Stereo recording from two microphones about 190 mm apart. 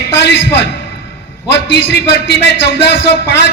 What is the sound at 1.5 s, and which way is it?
A man's voice, 65° left (ahead or behind).